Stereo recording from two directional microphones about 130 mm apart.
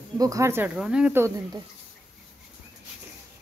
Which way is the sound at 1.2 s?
25° right (ahead or behind).